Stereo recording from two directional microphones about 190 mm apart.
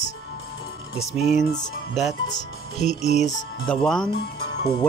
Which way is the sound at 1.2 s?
35° left (ahead or behind).